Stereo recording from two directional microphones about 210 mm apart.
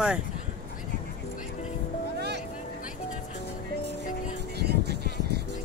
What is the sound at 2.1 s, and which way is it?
Music, 50° right (ahead or behind).